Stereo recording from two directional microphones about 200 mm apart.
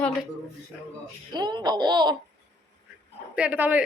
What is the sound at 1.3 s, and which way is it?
Speech, 20° right (ahead or behind).